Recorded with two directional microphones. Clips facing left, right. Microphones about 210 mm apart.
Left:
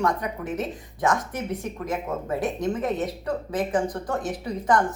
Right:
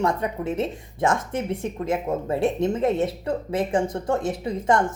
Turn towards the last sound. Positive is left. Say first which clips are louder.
# right 1 dB
turn(degrees=-25)  # may be behind; listen again after turning